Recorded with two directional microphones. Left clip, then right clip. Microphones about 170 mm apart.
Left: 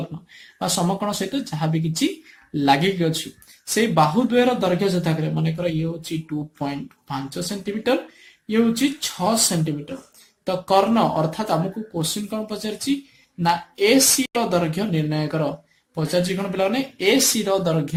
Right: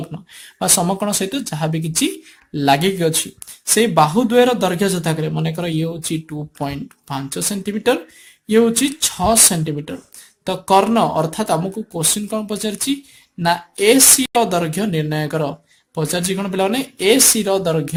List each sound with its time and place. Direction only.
0.6 s a man's voice: 40° right (ahead or behind)